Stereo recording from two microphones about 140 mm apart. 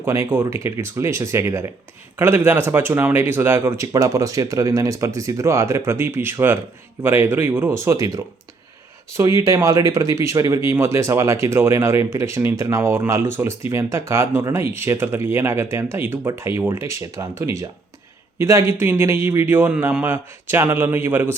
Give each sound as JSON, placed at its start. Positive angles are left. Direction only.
{"t": 0.0, "sound": "speech", "side_deg": -20}